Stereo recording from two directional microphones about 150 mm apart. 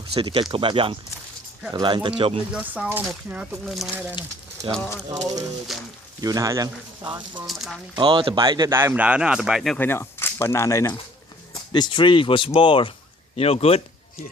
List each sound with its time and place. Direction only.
0.1 s speech: 40° right (ahead or behind)
2.5 s speech: 10° right (ahead or behind)
4.2 s speech: 30° left (ahead or behind)
4.7 s speech: 15° left (ahead or behind)
5.7 s speech: centre (ahead or behind)
6.2 s speech: 25° right (ahead or behind)
7.4 s speech: centre (ahead or behind)
7.9 s speech: 30° right (ahead or behind); by 9.7 s 5° right (ahead or behind)
9.7 s speech: 15° left (ahead or behind)
11.7 s speech: 30° left (ahead or behind)